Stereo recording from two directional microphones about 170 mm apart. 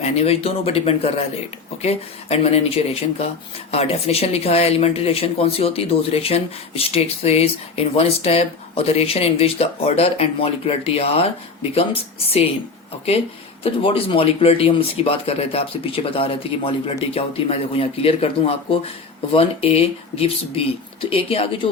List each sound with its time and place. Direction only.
0.0 s speech: 40° left (ahead or behind)
13.7 s speech: 35° left (ahead or behind)